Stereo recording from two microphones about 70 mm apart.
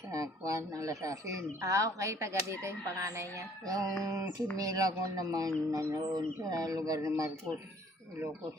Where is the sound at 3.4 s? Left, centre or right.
Right.